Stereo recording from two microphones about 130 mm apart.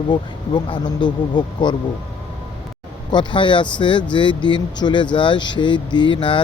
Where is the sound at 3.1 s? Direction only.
40° left (ahead or behind).